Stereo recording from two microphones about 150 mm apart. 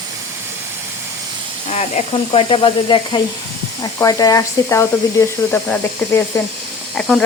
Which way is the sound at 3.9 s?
25° left (ahead or behind).